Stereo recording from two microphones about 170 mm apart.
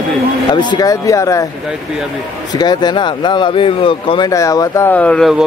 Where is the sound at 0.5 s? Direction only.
25° left (ahead or behind).